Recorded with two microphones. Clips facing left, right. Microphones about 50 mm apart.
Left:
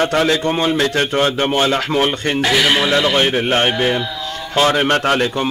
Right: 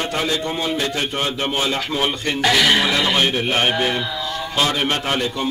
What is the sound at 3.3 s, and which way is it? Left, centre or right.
Speech, left.